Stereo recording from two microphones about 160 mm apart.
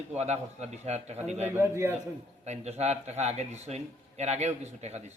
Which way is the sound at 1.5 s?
15° right (ahead or behind).